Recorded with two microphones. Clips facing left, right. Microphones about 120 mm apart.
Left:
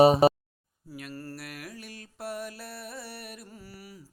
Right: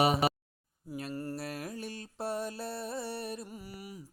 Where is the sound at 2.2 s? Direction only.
25° right (ahead or behind).